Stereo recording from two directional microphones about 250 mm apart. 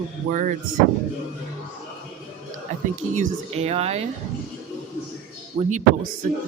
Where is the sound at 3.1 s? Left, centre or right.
Right.